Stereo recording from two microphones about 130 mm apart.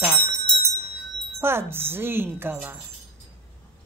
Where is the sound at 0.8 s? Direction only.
20° right (ahead or behind).